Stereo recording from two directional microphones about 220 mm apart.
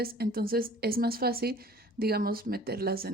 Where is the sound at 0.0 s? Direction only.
45° right (ahead or behind).